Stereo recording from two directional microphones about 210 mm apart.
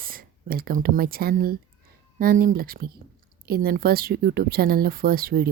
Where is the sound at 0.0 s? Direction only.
45° right (ahead or behind).